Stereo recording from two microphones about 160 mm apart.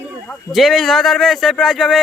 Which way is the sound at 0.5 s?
Centre (ahead or behind).